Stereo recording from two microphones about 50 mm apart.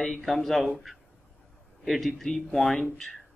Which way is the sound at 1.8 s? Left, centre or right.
Centre.